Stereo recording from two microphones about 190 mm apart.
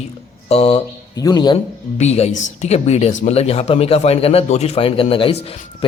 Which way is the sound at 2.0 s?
35° left (ahead or behind).